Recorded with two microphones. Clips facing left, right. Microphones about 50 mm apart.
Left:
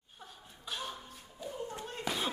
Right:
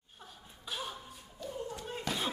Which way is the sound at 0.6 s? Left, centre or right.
Centre.